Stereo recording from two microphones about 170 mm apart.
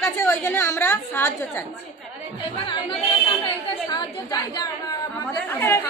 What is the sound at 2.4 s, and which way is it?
A woman's voice, 30° left (ahead or behind).